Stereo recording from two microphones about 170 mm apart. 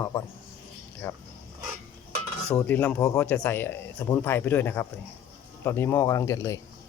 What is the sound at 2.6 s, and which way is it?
Speech, 10° left (ahead or behind).